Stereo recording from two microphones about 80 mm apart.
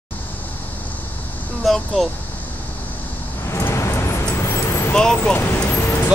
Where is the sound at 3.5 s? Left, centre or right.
Left.